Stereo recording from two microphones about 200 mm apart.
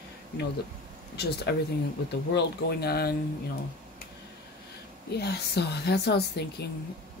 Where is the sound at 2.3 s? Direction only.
55° left (ahead or behind).